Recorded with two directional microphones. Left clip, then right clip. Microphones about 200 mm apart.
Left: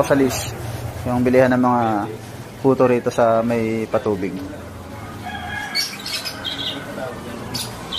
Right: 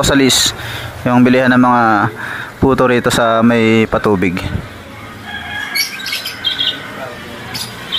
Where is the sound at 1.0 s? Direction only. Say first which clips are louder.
Right 5 dB; 40° right (ahead or behind).